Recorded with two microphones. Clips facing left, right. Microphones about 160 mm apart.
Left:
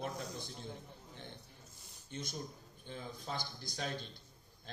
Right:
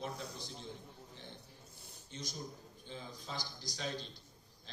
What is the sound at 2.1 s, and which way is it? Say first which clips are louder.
A man's voice: left 2 dB; 55° left (ahead or behind).